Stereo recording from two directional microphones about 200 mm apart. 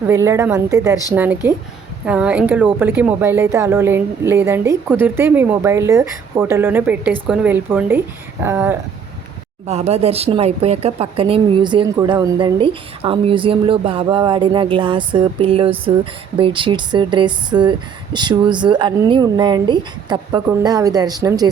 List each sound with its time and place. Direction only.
0.1 s a woman's voice: 15° right (ahead or behind)
9.6 s speech: 30° right (ahead or behind)